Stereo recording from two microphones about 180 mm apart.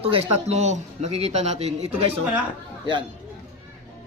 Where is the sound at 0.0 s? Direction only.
30° right (ahead or behind).